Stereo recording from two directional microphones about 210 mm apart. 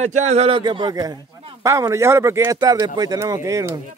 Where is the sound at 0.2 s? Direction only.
30° right (ahead or behind); by 3.7 s 15° right (ahead or behind).